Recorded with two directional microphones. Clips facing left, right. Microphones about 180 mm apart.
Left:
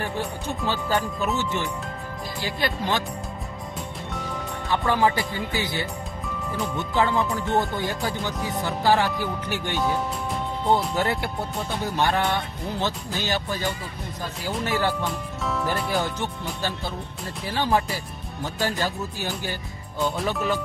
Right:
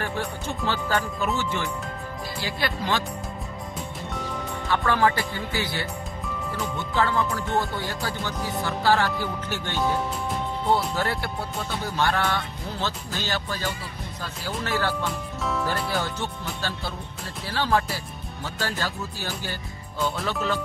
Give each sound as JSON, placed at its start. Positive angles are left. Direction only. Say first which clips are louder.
{"t": 0.0, "sound": "speech", "louder": "left 1 dB", "side_deg": 15}
{"t": 3.7, "sound": "music", "louder": "even", "side_deg": 0}
{"t": 4.8, "sound": "speech", "louder": "left 1 dB", "side_deg": 15}
{"t": 11.0, "sound": "speech", "louder": "left 2 dB", "side_deg": 20}
{"t": 15.0, "sound": "speech", "louder": "even", "side_deg": 0}
{"t": 15.9, "sound": "speech", "louder": "left 2 dB", "side_deg": 15}
{"t": 17.5, "sound": "speech", "louder": "left 1 dB", "side_deg": 15}